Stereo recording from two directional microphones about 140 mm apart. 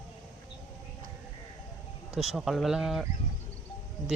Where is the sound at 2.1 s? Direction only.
Centre (ahead or behind).